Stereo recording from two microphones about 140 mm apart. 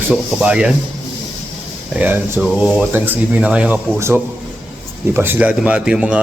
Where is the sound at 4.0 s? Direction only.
20° right (ahead or behind).